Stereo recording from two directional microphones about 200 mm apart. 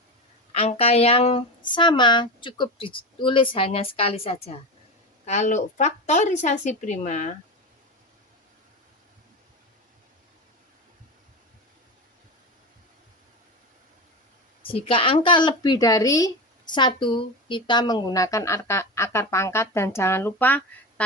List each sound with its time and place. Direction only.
0.5 s a woman's voice: 30° left (ahead or behind)
14.6 s a woman's voice: 25° left (ahead or behind); by 20.6 s 10° left (ahead or behind)